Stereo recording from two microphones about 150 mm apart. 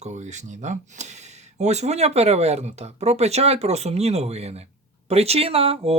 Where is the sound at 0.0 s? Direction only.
50° right (ahead or behind).